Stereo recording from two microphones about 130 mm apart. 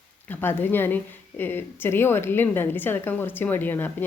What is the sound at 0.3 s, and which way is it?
A woman's voice, 15° left (ahead or behind).